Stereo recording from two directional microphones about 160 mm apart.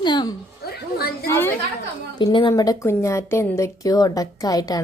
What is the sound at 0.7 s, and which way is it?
Speech, 75° left (ahead or behind).